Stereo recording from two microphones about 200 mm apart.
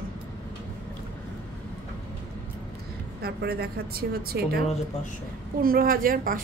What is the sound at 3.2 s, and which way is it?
A woman's voice, 50° right (ahead or behind).